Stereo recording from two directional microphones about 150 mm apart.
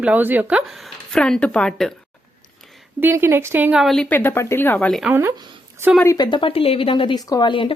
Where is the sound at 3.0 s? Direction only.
15° right (ahead or behind).